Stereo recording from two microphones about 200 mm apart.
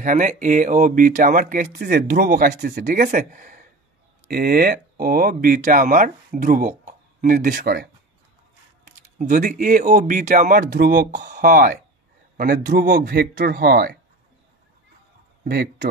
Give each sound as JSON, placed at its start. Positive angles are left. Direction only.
{"t": 0.0, "sound": "speech", "side_deg": -40}
{"t": 9.3, "sound": "speech", "side_deg": -45}
{"t": 15.4, "sound": "speech", "side_deg": -50}